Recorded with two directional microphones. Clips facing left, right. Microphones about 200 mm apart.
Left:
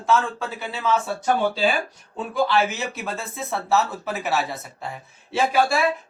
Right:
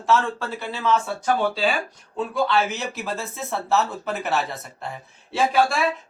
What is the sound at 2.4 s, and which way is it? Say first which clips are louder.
Speech: left 1 dB; centre (ahead or behind).